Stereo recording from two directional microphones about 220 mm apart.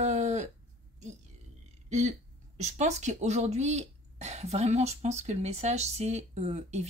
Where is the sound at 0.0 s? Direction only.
30° right (ahead or behind).